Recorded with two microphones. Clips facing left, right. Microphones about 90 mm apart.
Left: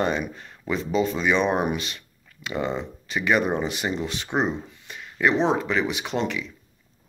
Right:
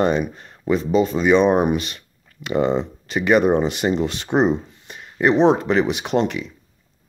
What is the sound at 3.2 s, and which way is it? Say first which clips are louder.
Speech: right 6 dB; 55° right (ahead or behind).